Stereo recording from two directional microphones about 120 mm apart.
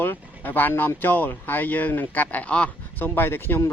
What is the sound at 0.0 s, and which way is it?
Speech, 15° left (ahead or behind).